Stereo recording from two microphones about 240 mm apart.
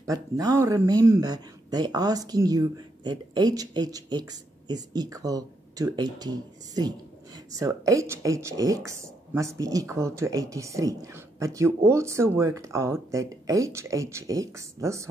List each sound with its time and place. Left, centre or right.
0.0 s speech: centre